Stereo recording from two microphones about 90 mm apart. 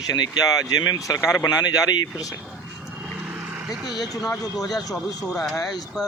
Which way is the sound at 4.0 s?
45° left (ahead or behind).